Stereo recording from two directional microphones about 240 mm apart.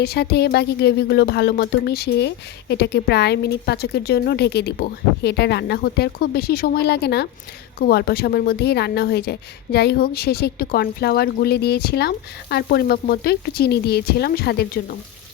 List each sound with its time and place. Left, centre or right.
0.0 s a woman's voice: left